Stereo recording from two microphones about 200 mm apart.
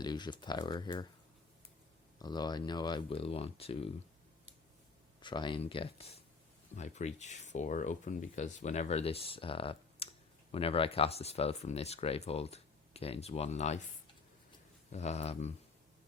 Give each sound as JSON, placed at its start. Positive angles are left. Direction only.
{"t": 0.0, "sound": "speech", "side_deg": 20}
{"t": 2.1, "sound": "speech", "side_deg": 20}
{"t": 5.2, "sound": "speech", "side_deg": 25}
{"t": 14.9, "sound": "speech", "side_deg": 35}